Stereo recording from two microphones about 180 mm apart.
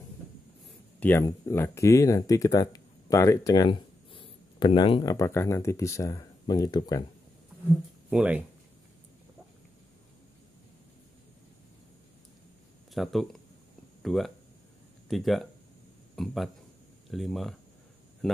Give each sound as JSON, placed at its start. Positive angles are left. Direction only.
{"t": 0.7, "sound": "speech", "side_deg": 10}
{"t": 8.1, "sound": "speech", "side_deg": -10}
{"t": 12.9, "sound": "a man's voice", "side_deg": 0}